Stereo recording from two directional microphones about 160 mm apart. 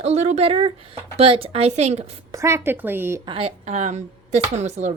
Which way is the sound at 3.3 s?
35° right (ahead or behind).